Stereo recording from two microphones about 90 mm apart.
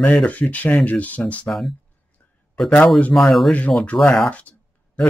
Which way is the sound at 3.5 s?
15° left (ahead or behind).